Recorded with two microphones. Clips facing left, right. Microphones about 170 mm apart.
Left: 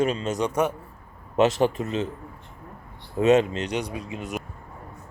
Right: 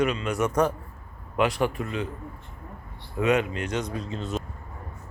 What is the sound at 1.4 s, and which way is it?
Speech, 25° left (ahead or behind).